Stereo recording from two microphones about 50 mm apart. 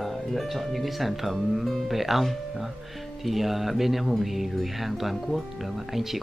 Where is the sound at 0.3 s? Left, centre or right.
Centre.